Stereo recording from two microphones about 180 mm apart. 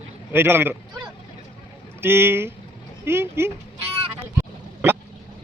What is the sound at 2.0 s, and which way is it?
A man's voice, 15° right (ahead or behind).